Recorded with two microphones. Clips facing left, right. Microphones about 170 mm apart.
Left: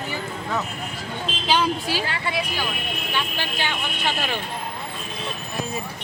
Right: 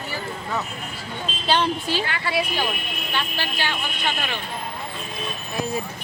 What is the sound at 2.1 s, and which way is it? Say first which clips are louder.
Speech: even; 25° left (ahead or behind).